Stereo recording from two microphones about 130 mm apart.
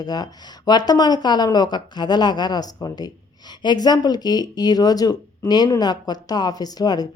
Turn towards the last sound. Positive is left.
turn(degrees=30)  # may be behind; listen again after turning